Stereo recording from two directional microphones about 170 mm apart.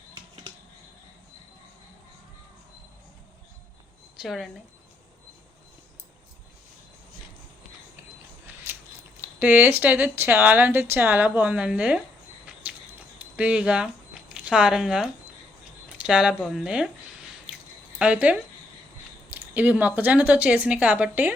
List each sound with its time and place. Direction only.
4.2 s speech: centre (ahead or behind)
8.4 s mechanisms: 15° right (ahead or behind)
9.2 s speech: 10° right (ahead or behind)
12.7 s a sound: 10° right (ahead or behind)
13.1 s speech: 10° right (ahead or behind)